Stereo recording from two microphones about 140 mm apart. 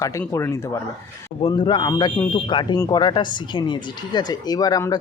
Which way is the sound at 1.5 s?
35° left (ahead or behind).